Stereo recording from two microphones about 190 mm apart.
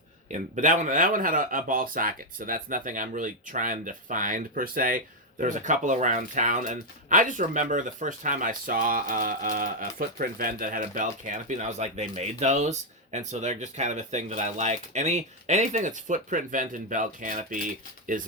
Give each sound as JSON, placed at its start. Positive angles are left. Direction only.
{"t": 0.3, "sound": "speech", "side_deg": -40}